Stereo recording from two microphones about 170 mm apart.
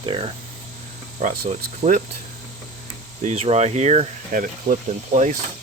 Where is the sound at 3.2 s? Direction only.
40° right (ahead or behind).